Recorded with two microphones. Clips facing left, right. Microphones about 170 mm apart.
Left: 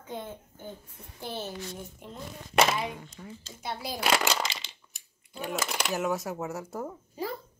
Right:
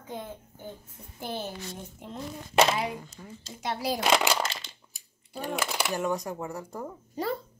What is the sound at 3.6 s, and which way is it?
Speech, 85° right.